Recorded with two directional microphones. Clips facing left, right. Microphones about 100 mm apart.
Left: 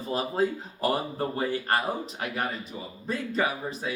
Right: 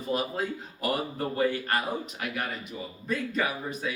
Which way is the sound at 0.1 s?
30° left (ahead or behind).